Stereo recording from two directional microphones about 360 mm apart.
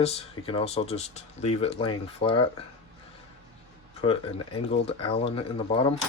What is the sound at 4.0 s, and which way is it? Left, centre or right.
Speech, centre.